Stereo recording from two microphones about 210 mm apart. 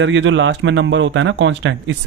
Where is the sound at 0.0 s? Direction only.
60° right (ahead or behind).